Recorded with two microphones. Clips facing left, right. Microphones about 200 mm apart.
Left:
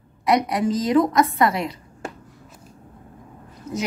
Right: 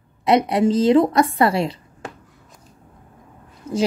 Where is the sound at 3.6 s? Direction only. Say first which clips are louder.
Right 4 dB; 30° right (ahead or behind).